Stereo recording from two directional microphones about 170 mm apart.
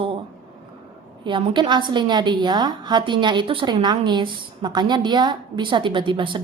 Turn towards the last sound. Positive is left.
turn(degrees=-30)  # may be behind; listen again after turning